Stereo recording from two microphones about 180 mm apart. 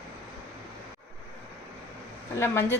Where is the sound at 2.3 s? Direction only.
15° left (ahead or behind).